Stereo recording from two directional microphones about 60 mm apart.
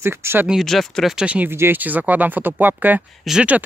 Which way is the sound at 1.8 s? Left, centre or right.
Right.